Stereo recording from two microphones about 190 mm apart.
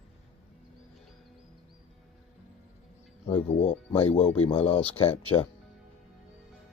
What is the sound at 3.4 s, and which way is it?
Speech, 35° left (ahead or behind).